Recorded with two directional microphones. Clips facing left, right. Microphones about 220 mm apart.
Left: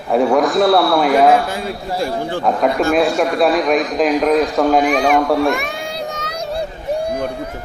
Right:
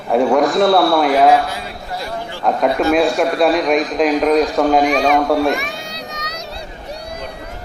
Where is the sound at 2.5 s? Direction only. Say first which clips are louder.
Right 1 dB; centre (ahead or behind).